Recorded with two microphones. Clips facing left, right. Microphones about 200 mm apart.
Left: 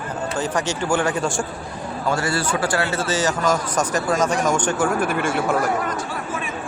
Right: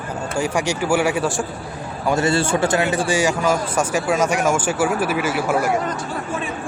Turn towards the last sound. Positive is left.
turn(degrees=-5)  # may be behind; listen again after turning